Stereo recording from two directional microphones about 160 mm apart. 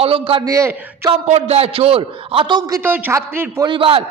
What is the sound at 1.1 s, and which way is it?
A man's voice, 40° right (ahead or behind).